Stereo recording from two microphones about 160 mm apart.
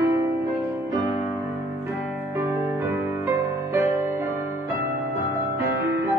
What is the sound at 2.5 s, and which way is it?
Music, 15° right (ahead or behind).